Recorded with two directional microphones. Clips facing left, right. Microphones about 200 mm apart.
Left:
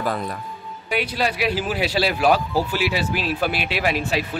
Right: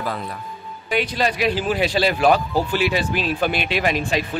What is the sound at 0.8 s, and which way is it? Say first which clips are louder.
Speech: right 2 dB; 10° left (ahead or behind).